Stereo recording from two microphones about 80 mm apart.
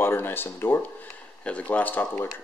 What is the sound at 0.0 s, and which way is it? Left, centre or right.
Speech, left.